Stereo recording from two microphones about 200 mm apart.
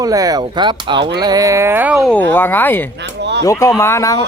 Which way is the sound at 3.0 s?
60° right (ahead or behind).